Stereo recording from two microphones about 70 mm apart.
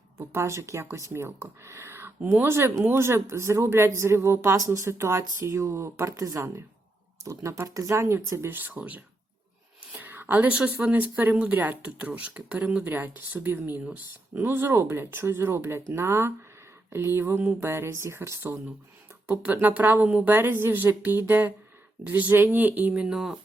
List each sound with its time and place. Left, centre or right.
0.2 s speech: right
4.5 s speech: right
4.9 s speech: right
8.5 s speech: right
19.6 s speech: right
23.0 s speech: centre